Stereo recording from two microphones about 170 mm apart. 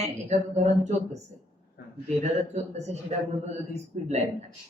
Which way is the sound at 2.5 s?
40° right (ahead or behind).